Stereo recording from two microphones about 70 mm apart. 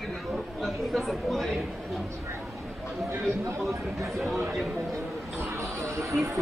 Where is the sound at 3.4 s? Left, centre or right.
Right.